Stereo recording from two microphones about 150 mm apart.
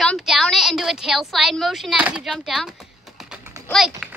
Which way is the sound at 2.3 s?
Centre (ahead or behind).